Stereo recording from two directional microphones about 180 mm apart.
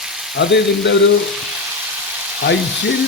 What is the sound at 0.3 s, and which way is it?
Speech, 75° left (ahead or behind).